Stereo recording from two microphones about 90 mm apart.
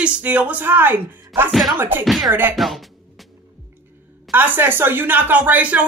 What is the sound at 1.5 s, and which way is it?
Speech, centre (ahead or behind).